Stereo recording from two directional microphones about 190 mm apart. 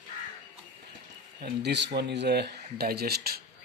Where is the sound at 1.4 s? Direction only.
60° right (ahead or behind).